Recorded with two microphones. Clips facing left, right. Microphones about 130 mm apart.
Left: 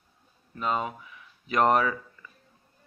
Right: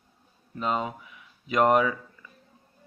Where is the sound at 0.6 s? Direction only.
25° right (ahead or behind).